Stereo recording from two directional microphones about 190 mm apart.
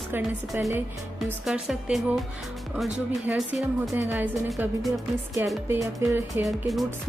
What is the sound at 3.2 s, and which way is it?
Speech, centre (ahead or behind).